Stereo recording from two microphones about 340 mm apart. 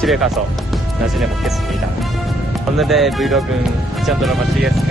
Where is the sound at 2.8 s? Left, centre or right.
Centre.